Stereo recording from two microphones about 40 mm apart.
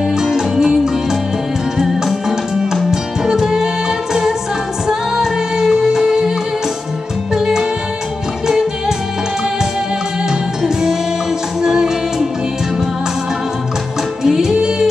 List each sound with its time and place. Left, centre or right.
0.1 s music: centre
1.8 s music: centre
7.3 s music: centre
10.6 s music: centre
14.2 s music: centre